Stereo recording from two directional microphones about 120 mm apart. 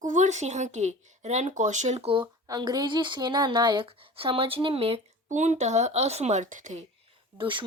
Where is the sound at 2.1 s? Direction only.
40° right (ahead or behind); by 5.0 s 55° right (ahead or behind).